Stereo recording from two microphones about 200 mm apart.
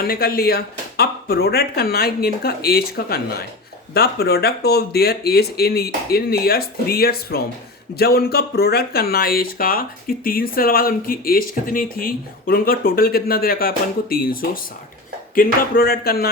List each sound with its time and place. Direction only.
0.0 s speech: 50° left (ahead or behind)